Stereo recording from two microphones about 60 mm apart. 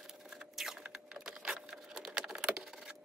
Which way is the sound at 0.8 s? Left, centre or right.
Right.